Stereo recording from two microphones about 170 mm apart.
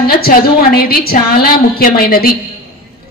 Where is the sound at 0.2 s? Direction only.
60° left (ahead or behind).